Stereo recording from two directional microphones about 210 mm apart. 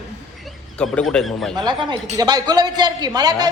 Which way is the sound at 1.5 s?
20° right (ahead or behind).